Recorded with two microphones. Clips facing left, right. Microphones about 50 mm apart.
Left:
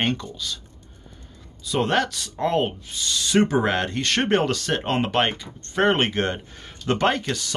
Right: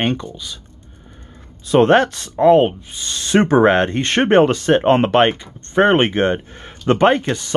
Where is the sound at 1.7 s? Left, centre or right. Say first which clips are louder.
Right 10 dB; right.